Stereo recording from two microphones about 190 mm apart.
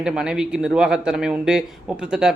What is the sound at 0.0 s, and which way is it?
A man's voice, 5° right (ahead or behind).